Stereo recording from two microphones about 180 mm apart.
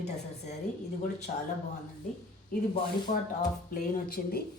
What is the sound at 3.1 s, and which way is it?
Speech, 40° left (ahead or behind).